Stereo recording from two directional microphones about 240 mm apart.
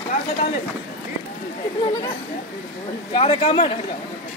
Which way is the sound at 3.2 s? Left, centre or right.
Left.